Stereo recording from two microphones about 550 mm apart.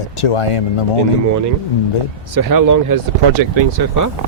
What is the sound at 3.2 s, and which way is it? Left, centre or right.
Speech, right.